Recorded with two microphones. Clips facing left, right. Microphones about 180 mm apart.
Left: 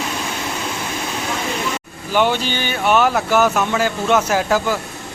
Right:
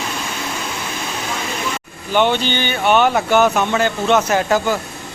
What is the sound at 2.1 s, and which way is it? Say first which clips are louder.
Speech: right 1 dB; 5° left (ahead or behind).